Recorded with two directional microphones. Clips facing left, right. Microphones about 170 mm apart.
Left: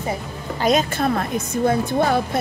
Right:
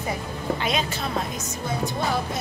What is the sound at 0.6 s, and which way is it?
Speech, 45° left (ahead or behind).